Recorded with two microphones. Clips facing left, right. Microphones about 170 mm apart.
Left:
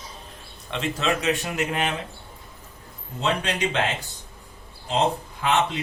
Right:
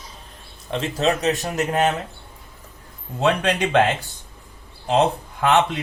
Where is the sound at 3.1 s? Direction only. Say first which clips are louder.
Right 5 dB; 60° right (ahead or behind).